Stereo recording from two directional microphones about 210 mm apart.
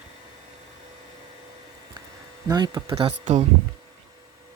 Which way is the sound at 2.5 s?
20° right (ahead or behind).